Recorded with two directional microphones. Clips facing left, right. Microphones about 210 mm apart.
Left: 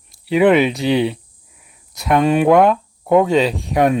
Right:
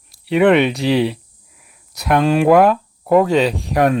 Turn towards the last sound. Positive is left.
turn(degrees=0)  # may be behind; listen again after turning